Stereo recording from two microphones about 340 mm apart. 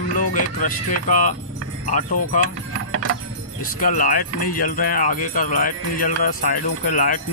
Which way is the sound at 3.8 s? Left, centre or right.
Left.